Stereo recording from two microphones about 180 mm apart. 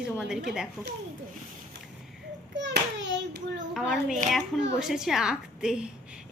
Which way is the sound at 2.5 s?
80° right.